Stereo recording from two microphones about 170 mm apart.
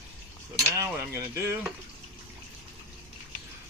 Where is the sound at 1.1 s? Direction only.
15° right (ahead or behind).